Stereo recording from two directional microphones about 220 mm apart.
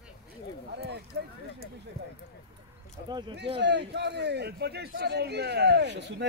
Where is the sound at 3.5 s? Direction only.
50° right (ahead or behind).